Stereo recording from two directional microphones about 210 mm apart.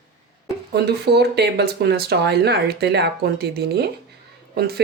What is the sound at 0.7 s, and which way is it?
Speech, 50° right (ahead or behind).